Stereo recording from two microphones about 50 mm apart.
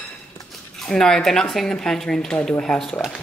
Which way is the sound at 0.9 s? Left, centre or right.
Centre.